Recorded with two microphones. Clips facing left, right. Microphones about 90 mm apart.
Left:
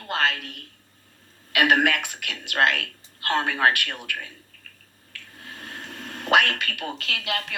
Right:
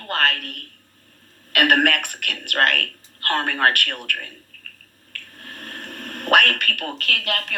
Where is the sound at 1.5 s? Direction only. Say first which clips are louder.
Right 2 dB; 55° right (ahead or behind).